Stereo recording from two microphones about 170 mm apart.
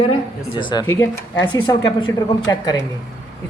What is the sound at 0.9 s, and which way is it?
Speech, 15° left (ahead or behind).